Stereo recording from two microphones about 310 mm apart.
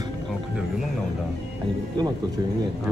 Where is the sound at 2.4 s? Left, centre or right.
Centre.